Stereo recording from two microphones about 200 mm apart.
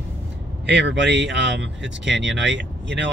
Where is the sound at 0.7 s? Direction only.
60° right (ahead or behind).